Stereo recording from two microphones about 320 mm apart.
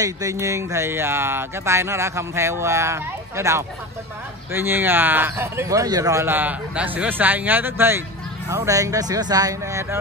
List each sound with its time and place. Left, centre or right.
0.0 s speech: centre